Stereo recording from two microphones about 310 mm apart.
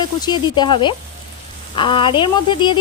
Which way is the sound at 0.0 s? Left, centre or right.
Centre.